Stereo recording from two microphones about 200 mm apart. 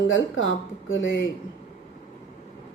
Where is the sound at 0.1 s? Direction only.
75° left (ahead or behind).